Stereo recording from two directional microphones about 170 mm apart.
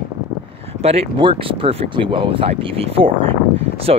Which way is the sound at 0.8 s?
35° right (ahead or behind).